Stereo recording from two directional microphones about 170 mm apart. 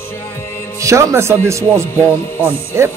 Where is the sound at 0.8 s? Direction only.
20° right (ahead or behind).